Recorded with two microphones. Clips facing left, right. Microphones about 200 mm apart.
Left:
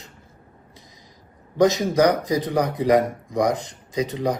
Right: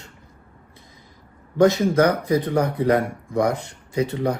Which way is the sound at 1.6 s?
15° left (ahead or behind).